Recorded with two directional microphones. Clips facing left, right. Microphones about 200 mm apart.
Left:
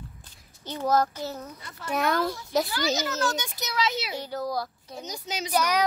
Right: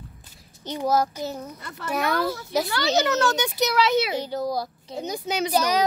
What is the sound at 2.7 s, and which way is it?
A child's voice, 70° right (ahead or behind).